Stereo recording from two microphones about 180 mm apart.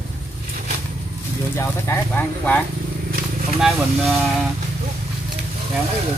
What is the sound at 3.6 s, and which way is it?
Speech, centre (ahead or behind).